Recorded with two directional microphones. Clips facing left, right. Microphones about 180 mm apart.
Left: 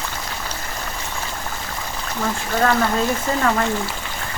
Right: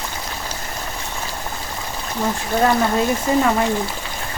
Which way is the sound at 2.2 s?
20° right (ahead or behind).